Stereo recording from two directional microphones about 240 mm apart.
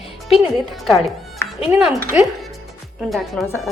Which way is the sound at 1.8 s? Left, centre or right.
Centre.